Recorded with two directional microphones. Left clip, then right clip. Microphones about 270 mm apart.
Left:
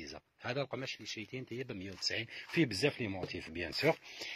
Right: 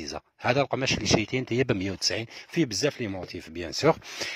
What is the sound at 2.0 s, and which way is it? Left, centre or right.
Speech, right.